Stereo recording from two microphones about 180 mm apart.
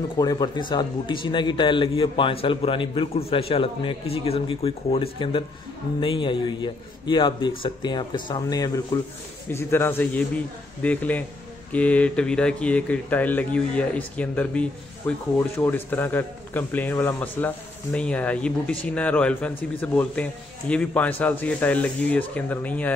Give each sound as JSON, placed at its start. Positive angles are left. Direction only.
{"t": 0.2, "sound": "a man's voice", "side_deg": 20}